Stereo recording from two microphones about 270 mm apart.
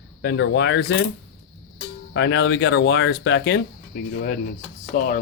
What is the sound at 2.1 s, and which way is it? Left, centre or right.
Speech, left.